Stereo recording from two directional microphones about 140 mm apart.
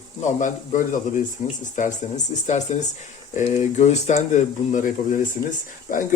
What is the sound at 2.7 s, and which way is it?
Speech, 55° left (ahead or behind).